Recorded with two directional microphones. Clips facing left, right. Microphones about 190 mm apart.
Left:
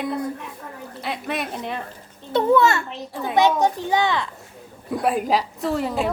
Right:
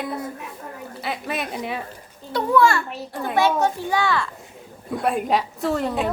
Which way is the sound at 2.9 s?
5° right (ahead or behind).